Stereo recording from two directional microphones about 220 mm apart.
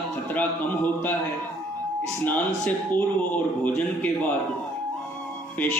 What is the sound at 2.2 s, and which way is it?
Speech, 5° left (ahead or behind).